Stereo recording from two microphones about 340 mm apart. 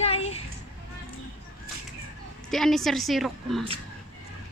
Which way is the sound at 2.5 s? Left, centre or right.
Centre.